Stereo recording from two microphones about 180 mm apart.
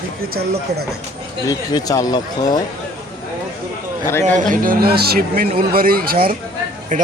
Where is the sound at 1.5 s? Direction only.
20° left (ahead or behind).